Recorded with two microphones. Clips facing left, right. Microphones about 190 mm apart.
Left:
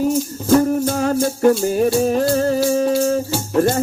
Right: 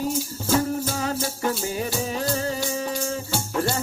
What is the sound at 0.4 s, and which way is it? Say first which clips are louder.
Music: left 9 dB; 55° left (ahead or behind).